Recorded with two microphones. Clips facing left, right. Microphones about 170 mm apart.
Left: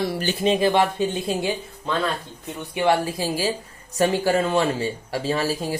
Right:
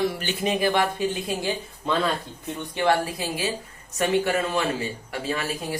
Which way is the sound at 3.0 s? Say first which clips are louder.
Left 4 dB; 30° left (ahead or behind).